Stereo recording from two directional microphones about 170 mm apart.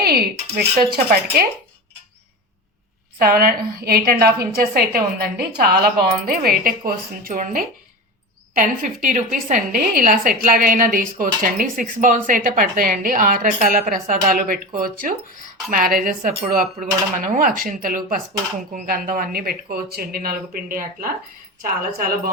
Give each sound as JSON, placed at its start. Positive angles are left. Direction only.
{"t": 0.0, "sound": "a sound", "side_deg": -65}
{"t": 0.5, "sound": "speech", "side_deg": -65}
{"t": 3.2, "sound": "a woman's voice", "side_deg": -60}
{"t": 15.7, "sound": "a woman's voice", "side_deg": -55}